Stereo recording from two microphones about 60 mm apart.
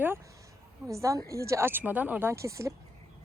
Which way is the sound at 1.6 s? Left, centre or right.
Right.